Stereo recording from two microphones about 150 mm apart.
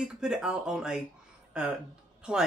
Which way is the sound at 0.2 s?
5° right (ahead or behind).